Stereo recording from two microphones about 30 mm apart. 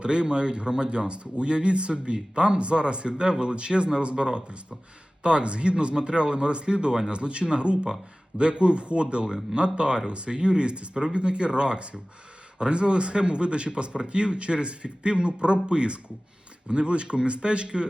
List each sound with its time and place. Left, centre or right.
0.0 s speech: right
9.2 s speech: right